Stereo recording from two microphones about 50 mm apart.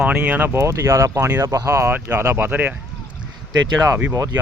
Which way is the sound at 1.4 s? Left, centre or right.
Right.